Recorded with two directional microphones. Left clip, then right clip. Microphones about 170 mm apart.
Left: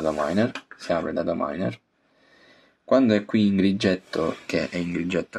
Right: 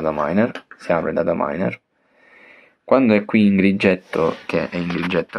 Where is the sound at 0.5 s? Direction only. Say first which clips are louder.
Right 3 dB; 35° right (ahead or behind).